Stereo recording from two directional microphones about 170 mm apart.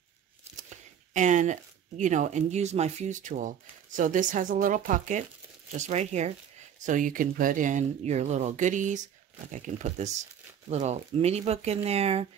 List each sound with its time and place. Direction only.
0.7 s speech: 45° right (ahead or behind)